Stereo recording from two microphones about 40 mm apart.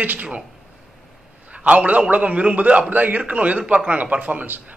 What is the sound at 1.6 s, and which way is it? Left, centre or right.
A man's voice, right.